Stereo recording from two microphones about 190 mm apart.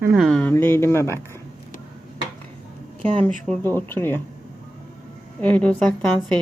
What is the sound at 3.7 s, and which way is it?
Speech, 10° left (ahead or behind).